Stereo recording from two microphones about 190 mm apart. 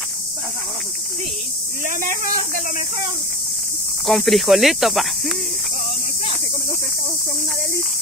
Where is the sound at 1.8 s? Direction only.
45° right (ahead or behind).